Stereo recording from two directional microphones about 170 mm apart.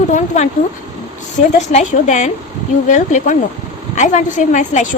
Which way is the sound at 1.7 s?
45° left (ahead or behind).